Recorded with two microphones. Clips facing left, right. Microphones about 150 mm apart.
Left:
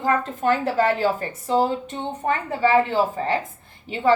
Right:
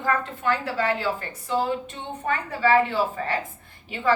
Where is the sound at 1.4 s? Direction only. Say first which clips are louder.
Left 4 dB; 40° left (ahead or behind).